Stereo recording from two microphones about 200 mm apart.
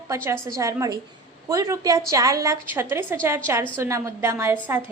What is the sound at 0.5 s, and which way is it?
A woman's voice, 15° right (ahead or behind).